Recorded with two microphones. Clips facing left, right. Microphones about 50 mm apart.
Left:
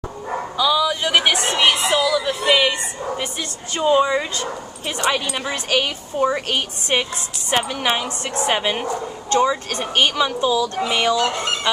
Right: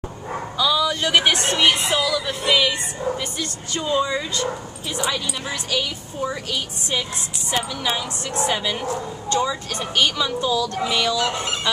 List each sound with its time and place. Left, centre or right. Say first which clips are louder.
0.6 s a woman's voice: left 2 dB; centre
2.4 s speech: left 1 dB; centre
5.1 s a woman's voice: left 4 dB; left
10.9 s speech: left 4 dB; left
11.7 s speech: left 3 dB; centre